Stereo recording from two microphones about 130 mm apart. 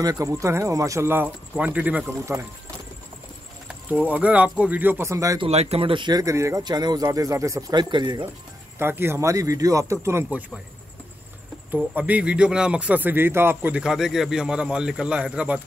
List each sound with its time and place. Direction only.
0.0 s speech: 25° right (ahead or behind)
3.6 s speech: 10° right (ahead or behind)
5.4 s speech: 55° right (ahead or behind); by 7.8 s 25° right (ahead or behind)
7.9 s speech: 35° right (ahead or behind)
8.7 s speech: 15° right (ahead or behind)
11.7 s speech: 10° right (ahead or behind)